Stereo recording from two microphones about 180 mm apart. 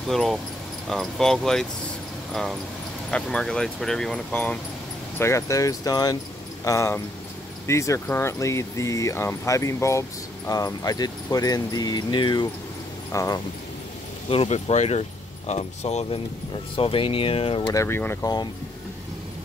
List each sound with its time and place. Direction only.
0.1 s speech: centre (ahead or behind)
3.1 s speech: 5° left (ahead or behind)
14.3 s speech: 35° left (ahead or behind)
17.8 s speech: 10° left (ahead or behind)